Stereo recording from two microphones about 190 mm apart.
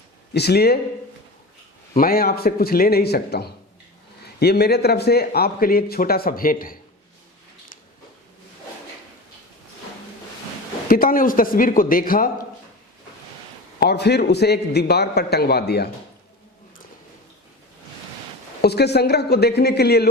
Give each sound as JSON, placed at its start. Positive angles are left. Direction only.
{"t": 0.3, "sound": "a man's voice", "side_deg": 60}
{"t": 2.0, "sound": "speech", "side_deg": 50}
{"t": 10.8, "sound": "speech", "side_deg": 50}
{"t": 13.7, "sound": "a man's voice", "side_deg": 60}
{"t": 18.6, "sound": "a man's voice", "side_deg": 60}